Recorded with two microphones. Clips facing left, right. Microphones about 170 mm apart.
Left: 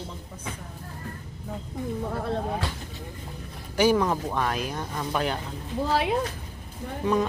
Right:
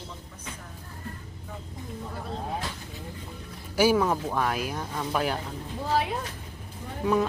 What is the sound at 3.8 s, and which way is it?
Speech, 5° right (ahead or behind).